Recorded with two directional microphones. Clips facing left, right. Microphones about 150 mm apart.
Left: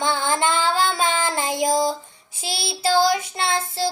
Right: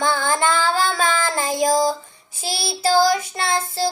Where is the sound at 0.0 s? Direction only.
20° left (ahead or behind).